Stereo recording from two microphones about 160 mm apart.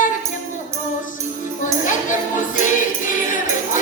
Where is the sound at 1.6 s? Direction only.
55° left (ahead or behind).